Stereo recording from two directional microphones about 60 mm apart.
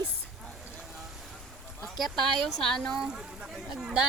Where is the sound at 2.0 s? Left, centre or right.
Centre.